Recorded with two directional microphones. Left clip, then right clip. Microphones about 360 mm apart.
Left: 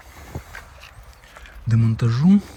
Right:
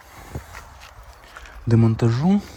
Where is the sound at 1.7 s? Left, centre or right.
Centre.